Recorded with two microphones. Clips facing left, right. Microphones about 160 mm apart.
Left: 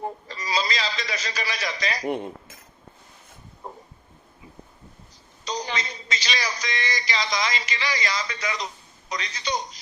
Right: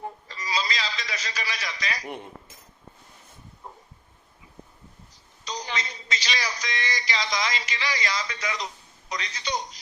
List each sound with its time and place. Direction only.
0.0 s a sound: 35° left (ahead or behind)
2.0 s cutlery: 90° left
5.6 s a man's voice: 35° left (ahead or behind)